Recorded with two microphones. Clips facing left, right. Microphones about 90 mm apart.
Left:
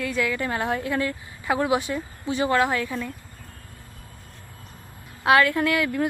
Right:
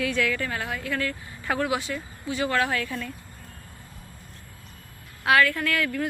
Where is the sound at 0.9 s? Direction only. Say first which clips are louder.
Left 3 dB; 15° left (ahead or behind).